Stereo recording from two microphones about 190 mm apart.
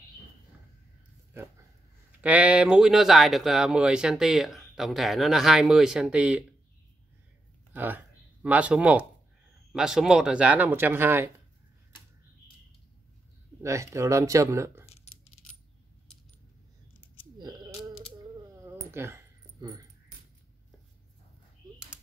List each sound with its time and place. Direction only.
2.2 s speech: 5° right (ahead or behind)
7.7 s speech: 10° right (ahead or behind)
13.6 s speech: 15° right (ahead or behind)
18.6 s a sound: 15° right (ahead or behind)